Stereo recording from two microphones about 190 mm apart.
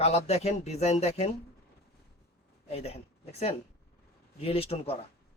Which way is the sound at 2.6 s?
30° left (ahead or behind).